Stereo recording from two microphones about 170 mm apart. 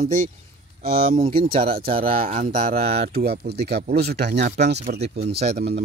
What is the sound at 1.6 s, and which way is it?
Speech, 60° right (ahead or behind).